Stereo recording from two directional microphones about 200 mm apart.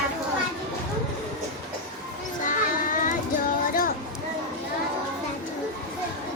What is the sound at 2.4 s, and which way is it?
Children playing, 40° left (ahead or behind).